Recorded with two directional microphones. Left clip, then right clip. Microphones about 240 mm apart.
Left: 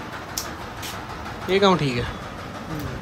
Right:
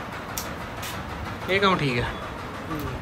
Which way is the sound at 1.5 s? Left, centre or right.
Centre.